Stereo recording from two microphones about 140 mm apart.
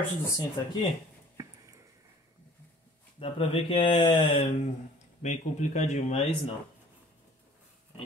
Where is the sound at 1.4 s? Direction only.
20° right (ahead or behind).